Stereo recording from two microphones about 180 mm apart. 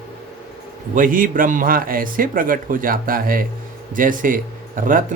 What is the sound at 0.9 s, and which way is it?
Speech, 50° right (ahead or behind).